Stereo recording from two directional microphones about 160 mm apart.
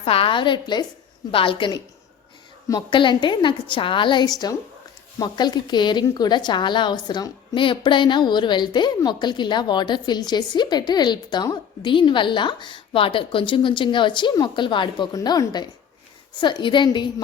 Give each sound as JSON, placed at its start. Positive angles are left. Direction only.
{"t": 0.0, "sound": "a woman's voice", "side_deg": 35}